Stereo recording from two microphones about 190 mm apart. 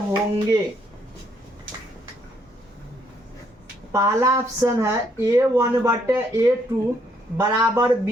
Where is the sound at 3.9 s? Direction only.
15° right (ahead or behind).